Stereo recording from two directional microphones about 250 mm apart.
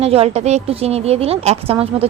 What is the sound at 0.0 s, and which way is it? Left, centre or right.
A woman's voice, right.